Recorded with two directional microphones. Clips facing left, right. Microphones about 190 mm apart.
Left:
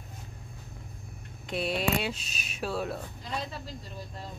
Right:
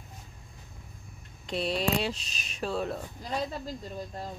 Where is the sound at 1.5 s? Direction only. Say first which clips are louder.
Even; centre (ahead or behind).